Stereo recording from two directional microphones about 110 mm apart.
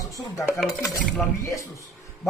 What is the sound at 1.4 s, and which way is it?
Speech, 30° left (ahead or behind).